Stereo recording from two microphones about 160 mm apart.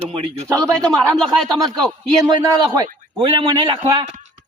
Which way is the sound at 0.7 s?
5° left (ahead or behind).